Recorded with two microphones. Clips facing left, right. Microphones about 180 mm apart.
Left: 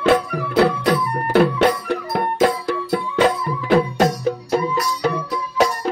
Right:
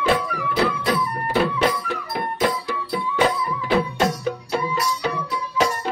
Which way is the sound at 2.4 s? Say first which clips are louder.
Left 4 dB; 50° left (ahead or behind).